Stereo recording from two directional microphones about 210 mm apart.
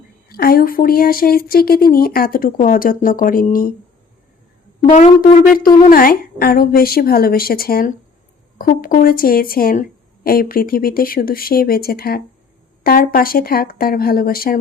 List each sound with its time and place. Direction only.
0.3 s speech: 45° left (ahead or behind)
4.8 s speech: 35° left (ahead or behind)